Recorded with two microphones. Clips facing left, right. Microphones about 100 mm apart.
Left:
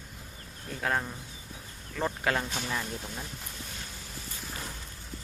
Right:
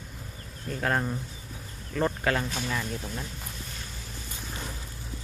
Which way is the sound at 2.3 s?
15° left (ahead or behind).